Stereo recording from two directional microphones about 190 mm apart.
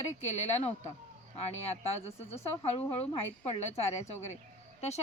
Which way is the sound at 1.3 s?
35° left (ahead or behind).